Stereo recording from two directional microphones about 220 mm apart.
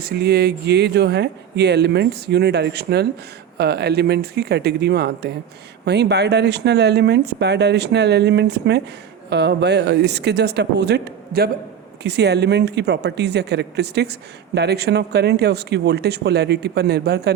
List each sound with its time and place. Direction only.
0.0 s speech: 45° right (ahead or behind)